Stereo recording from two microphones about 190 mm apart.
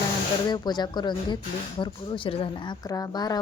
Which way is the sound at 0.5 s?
20° left (ahead or behind).